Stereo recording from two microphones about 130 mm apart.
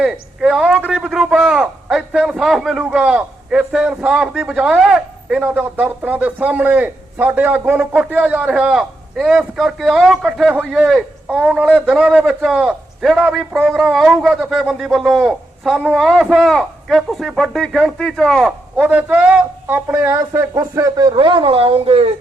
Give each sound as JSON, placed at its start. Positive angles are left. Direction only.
{"t": 0.0, "sound": "a man's voice", "side_deg": -5}
{"t": 18.8, "sound": "a man's voice", "side_deg": -10}